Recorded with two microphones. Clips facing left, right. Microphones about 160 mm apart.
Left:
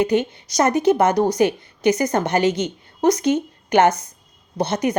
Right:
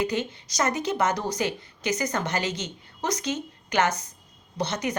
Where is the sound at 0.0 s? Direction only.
55° left (ahead or behind).